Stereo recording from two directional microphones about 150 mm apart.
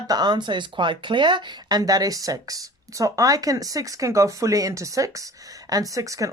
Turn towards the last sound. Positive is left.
turn(degrees=-20)  # may be behind; listen again after turning